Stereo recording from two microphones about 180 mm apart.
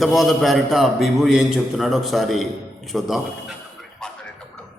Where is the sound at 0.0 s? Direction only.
Centre (ahead or behind).